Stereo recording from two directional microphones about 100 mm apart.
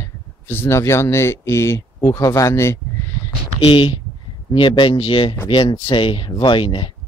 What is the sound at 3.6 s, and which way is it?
Speech, 60° left (ahead or behind).